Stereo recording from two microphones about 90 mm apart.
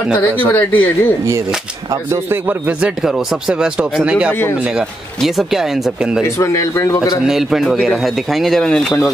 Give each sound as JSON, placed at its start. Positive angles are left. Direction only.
{"t": 0.4, "sound": "speech", "side_deg": 20}
{"t": 4.0, "sound": "speech", "side_deg": -10}
{"t": 6.4, "sound": "a man's voice", "side_deg": 35}
{"t": 7.2, "sound": "speech", "side_deg": -5}